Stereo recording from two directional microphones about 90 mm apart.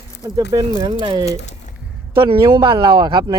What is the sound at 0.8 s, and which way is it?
Speech, 55° right (ahead or behind).